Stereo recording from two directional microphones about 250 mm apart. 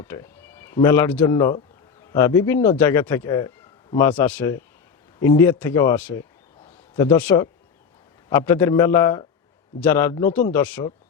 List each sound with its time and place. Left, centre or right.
0.0 s speech: centre